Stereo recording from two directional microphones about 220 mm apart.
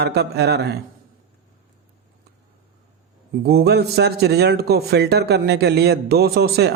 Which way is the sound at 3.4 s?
45° right (ahead or behind).